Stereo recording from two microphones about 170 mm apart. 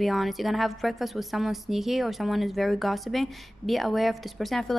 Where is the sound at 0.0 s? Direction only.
Centre (ahead or behind).